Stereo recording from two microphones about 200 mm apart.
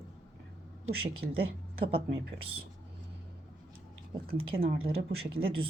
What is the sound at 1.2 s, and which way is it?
Speech, 50° right (ahead or behind).